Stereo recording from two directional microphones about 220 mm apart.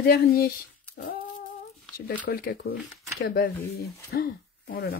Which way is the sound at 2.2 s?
40° left (ahead or behind).